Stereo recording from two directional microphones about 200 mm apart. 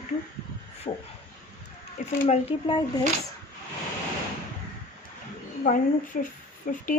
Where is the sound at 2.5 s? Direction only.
25° left (ahead or behind).